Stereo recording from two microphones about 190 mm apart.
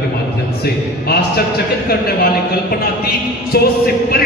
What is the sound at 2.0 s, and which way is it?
Speech, 50° left (ahead or behind).